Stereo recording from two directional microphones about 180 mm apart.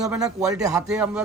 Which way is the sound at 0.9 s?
5° right (ahead or behind).